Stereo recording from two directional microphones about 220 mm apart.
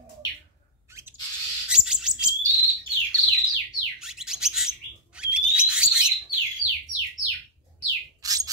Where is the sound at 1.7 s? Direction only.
5° right (ahead or behind).